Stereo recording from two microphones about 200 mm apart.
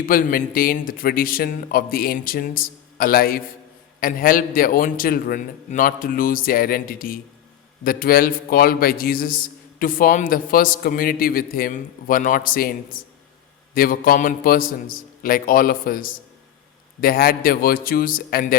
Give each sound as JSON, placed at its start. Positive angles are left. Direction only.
{"t": 0.0, "sound": "a man's voice", "side_deg": 45}